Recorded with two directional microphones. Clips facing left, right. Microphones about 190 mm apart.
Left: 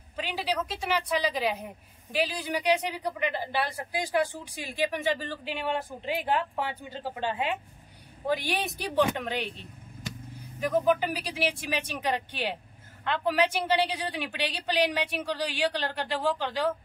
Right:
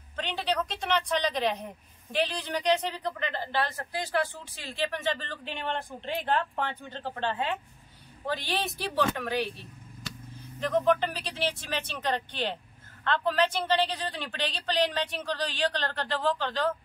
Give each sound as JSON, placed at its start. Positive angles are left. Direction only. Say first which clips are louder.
{"t": 0.1, "sound": "speech", "louder": "even", "side_deg": 10}